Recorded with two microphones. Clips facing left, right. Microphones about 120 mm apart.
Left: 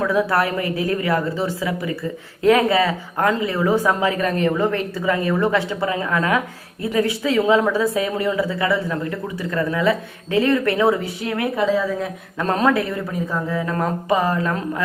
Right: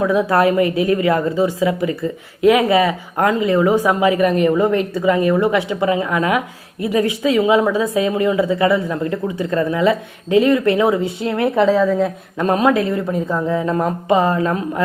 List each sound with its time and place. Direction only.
0.0 s a woman's voice: 20° right (ahead or behind)